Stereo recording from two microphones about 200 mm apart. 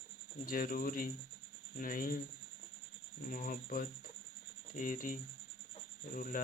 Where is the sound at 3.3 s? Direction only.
40° left (ahead or behind).